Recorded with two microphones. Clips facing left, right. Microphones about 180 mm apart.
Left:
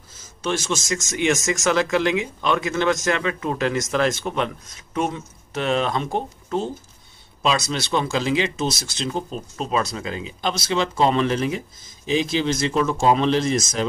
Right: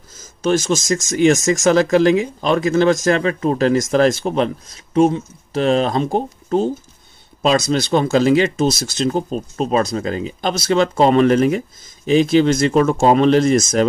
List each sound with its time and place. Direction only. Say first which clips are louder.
0.1 s speech: right 8 dB; 40° right (ahead or behind)